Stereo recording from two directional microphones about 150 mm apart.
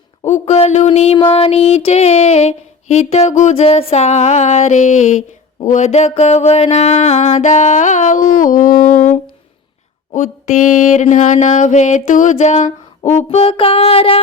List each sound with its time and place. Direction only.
0.3 s female singing: 50° left (ahead or behind)
10.1 s mantra: 55° left (ahead or behind)
13.1 s a sound: 45° left (ahead or behind)